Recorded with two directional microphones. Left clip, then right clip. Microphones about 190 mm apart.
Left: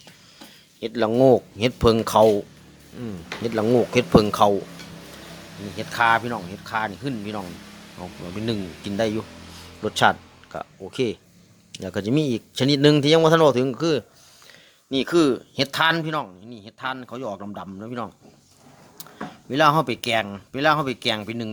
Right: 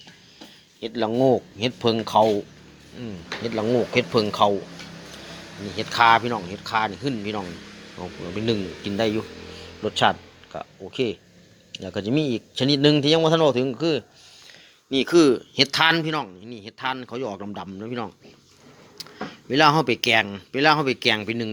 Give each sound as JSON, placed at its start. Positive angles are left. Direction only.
{"t": 0.8, "sound": "a man's voice", "side_deg": 30}
{"t": 5.7, "sound": "a man's voice", "side_deg": 10}